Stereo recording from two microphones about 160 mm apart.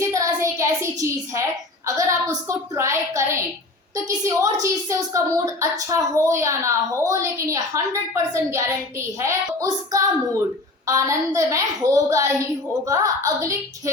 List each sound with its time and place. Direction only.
0.0 s child singing: 20° right (ahead or behind)
2.0 s a woman's voice: 15° right (ahead or behind)